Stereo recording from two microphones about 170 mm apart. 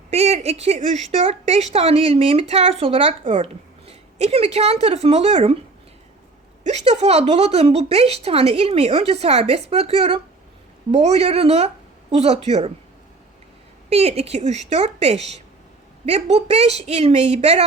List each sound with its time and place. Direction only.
0.1 s speech: 35° right (ahead or behind)
6.7 s speech: 40° right (ahead or behind)
13.9 s speech: 35° right (ahead or behind)